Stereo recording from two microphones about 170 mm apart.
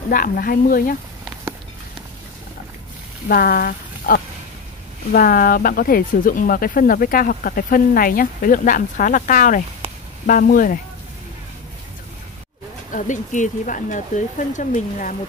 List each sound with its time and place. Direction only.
0.1 s speech: 60° left (ahead or behind)
3.3 s speech: 60° left (ahead or behind)
12.9 s speech: 50° left (ahead or behind)